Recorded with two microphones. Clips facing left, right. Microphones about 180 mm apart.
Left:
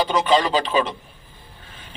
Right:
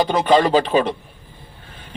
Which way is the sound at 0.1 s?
50° right (ahead or behind).